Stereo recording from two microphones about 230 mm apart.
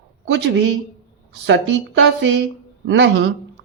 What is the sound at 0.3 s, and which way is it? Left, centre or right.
Speech, right.